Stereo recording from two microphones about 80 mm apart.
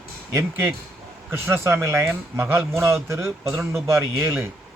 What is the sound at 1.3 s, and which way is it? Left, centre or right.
Speech, right.